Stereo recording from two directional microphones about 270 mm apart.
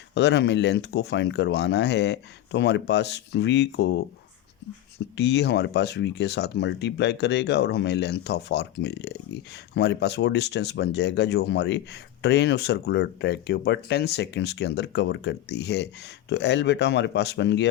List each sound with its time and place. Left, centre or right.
0.1 s speech: left
5.1 s speech: left